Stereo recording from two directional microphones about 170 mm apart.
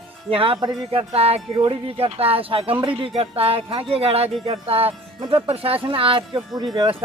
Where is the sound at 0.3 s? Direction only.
30° right (ahead or behind).